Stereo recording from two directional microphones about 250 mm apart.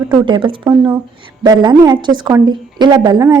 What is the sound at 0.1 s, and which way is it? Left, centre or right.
Speech, centre.